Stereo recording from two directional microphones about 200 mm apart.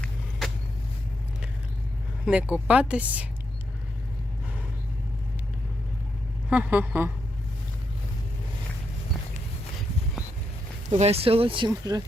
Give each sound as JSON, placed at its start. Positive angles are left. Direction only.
{"t": 0.0, "sound": "vehicle", "side_deg": 0}
{"t": 2.3, "sound": "a woman's voice", "side_deg": -5}
{"t": 6.5, "sound": "a woman's voice", "side_deg": -10}
{"t": 10.8, "sound": "speech", "side_deg": -35}